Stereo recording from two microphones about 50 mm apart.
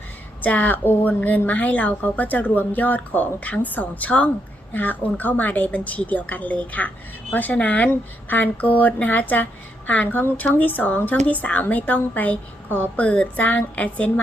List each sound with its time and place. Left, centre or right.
0.4 s a woman's voice: left